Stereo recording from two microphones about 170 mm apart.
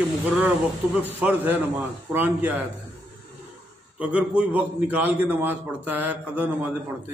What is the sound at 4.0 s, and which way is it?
A man's voice, 5° right (ahead or behind).